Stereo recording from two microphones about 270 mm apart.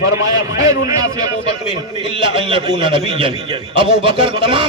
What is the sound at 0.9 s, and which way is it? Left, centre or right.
A man's voice, centre.